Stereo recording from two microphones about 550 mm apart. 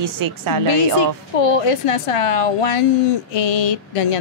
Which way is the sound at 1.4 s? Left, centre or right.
Left.